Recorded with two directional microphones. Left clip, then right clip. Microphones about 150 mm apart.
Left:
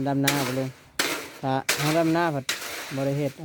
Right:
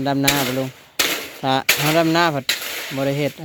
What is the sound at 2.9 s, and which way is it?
Speech, 5° left (ahead or behind).